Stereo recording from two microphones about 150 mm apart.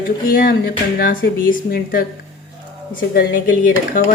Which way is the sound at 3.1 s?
75° left (ahead or behind).